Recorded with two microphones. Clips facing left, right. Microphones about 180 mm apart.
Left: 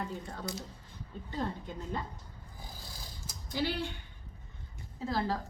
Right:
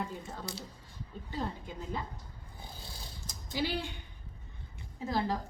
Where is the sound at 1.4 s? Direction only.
10° right (ahead or behind).